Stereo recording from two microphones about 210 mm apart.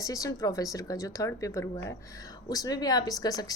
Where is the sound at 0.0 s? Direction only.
15° left (ahead or behind).